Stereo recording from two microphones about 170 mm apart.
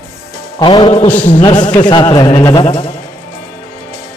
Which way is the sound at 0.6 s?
25° left (ahead or behind).